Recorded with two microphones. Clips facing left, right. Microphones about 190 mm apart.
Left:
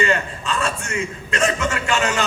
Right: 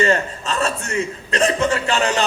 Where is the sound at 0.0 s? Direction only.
40° right (ahead or behind).